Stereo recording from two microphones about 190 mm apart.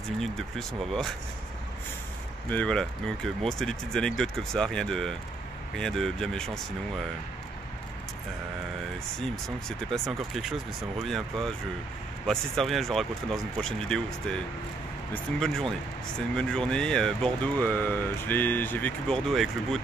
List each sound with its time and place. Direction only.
0.2 s speech: centre (ahead or behind)
2.5 s speech: 5° left (ahead or behind)
9.7 s speech: centre (ahead or behind)